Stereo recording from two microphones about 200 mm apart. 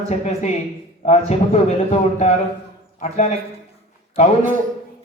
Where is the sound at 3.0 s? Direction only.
35° left (ahead or behind).